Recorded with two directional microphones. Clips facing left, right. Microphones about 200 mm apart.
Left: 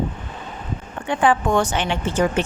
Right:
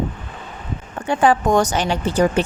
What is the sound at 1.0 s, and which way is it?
A woman's voice, 40° right (ahead or behind).